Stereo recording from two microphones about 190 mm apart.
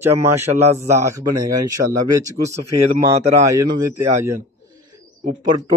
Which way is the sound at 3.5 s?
15° right (ahead or behind).